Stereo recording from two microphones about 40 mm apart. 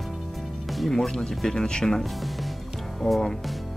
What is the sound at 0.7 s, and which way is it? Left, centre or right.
Music, centre.